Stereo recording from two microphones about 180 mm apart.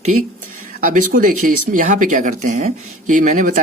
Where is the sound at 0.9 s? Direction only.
50° right (ahead or behind).